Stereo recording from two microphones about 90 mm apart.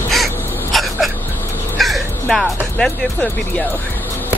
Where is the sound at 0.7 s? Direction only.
Centre (ahead or behind).